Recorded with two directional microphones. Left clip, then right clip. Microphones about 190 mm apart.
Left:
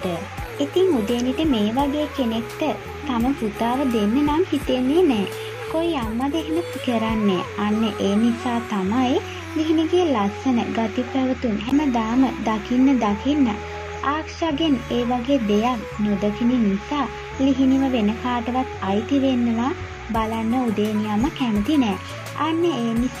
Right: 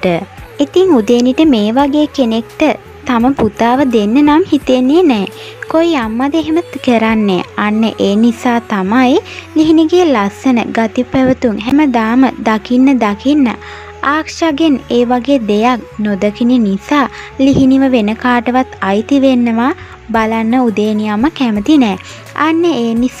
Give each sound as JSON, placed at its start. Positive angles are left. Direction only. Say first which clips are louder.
{"t": 0.6, "sound": "speech", "louder": "right 10 dB", "side_deg": -40}